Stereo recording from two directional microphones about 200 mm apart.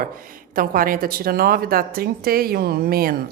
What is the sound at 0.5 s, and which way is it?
A woman's voice, 45° right (ahead or behind).